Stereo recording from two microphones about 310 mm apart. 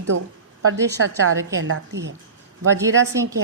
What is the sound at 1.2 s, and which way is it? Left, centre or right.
Speech, right.